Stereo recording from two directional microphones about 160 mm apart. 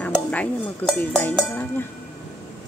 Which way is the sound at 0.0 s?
10° left (ahead or behind).